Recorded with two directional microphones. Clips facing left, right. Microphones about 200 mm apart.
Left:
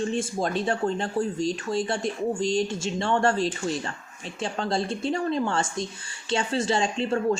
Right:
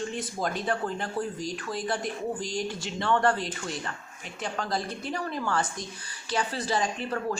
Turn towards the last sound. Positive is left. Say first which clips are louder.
# left 6 dB
turn(degrees=25)  # may be behind; listen again after turning